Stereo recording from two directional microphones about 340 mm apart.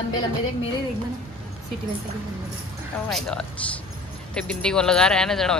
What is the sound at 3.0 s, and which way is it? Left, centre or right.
Speech, centre.